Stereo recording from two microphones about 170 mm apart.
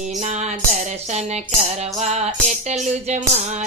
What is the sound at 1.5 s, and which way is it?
Speech, 45° right (ahead or behind).